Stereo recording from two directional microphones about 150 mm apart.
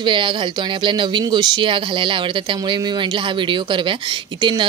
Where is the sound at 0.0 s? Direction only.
35° right (ahead or behind).